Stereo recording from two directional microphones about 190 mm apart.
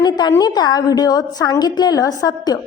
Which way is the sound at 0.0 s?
20° left (ahead or behind).